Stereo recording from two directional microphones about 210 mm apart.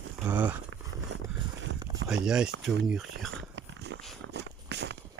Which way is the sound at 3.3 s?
60° right (ahead or behind).